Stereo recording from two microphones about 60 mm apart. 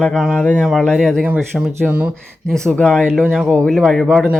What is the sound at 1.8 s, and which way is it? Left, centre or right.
Speech, centre.